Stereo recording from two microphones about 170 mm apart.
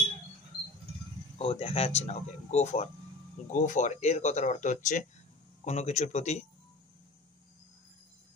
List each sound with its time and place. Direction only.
1.4 s speech: 35° left (ahead or behind)